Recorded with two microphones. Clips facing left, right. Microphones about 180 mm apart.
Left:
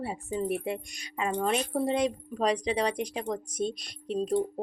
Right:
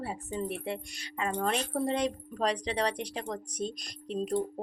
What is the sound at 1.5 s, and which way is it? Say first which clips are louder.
Speech: left 3 dB; 35° right (ahead or behind).